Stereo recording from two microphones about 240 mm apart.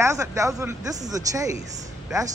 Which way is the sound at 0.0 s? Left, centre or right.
Centre.